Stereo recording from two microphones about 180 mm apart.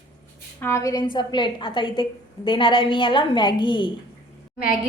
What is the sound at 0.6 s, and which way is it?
A woman's voice, 15° left (ahead or behind).